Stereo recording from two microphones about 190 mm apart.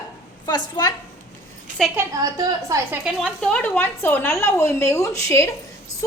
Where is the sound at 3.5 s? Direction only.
5° left (ahead or behind).